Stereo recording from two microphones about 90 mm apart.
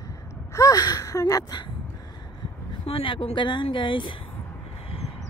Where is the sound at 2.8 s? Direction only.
80° left.